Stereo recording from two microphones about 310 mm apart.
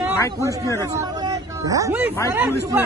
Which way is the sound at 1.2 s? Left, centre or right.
Centre.